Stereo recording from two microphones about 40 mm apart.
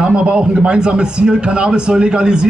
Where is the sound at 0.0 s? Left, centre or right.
Right.